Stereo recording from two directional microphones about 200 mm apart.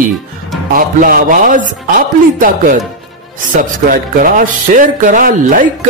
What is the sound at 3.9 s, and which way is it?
Speech, 40° right (ahead or behind).